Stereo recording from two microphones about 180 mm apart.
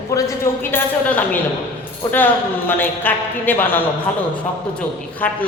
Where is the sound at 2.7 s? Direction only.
10° left (ahead or behind).